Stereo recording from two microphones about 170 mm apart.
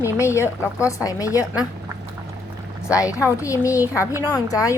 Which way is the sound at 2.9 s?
20° left (ahead or behind).